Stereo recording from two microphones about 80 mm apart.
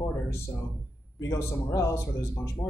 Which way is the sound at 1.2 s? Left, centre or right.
Left.